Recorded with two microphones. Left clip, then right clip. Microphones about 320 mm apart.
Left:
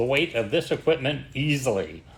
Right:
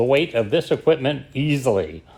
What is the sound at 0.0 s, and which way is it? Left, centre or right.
A man's voice, right.